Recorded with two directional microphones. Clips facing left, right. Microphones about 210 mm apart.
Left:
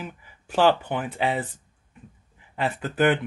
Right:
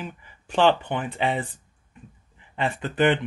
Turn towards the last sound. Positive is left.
turn(degrees=5)  # may be behind; listen again after turning